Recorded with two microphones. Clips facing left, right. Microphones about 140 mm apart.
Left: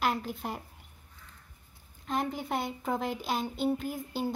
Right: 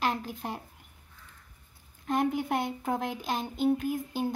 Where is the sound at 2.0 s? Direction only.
Centre (ahead or behind).